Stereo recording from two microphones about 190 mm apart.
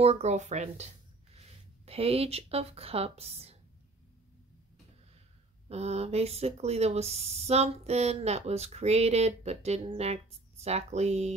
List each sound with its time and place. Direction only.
0.0 s speech: 35° right (ahead or behind)
1.9 s speech: 30° right (ahead or behind)
5.7 s speech: 35° right (ahead or behind)